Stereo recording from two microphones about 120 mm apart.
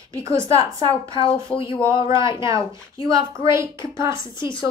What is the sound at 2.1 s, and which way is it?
Speech, 40° left (ahead or behind).